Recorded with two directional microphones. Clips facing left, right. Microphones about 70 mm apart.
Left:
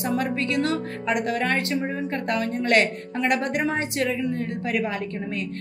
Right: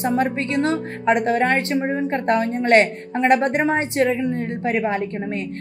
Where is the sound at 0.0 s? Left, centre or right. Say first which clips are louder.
Right 4 dB; right.